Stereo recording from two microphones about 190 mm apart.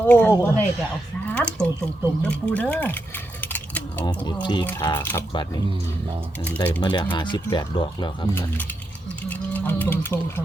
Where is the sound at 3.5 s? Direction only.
10° left (ahead or behind).